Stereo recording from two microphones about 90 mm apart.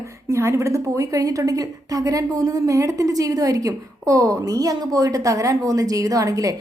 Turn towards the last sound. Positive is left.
turn(degrees=-40)  # may be behind; listen again after turning